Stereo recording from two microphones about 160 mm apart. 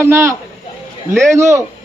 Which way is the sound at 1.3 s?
15° right (ahead or behind).